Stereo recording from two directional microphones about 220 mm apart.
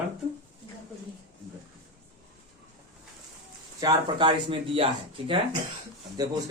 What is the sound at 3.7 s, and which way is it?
A man's voice, 20° right (ahead or behind).